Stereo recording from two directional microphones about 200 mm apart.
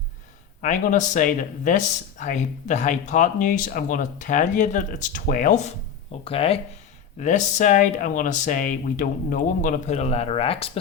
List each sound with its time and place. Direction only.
0.6 s speech: 40° left (ahead or behind)